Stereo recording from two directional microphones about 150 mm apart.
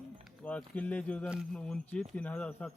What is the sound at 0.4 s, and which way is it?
Speech, 10° left (ahead or behind).